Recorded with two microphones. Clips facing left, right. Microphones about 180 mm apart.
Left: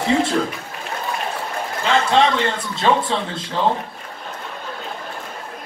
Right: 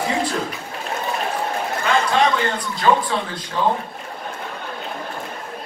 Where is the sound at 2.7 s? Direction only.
25° left (ahead or behind).